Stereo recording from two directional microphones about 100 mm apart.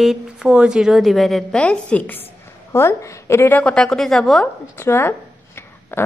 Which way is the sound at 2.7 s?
30° left (ahead or behind).